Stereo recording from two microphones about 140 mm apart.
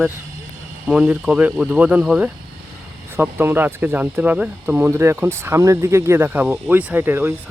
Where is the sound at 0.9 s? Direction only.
5° right (ahead or behind).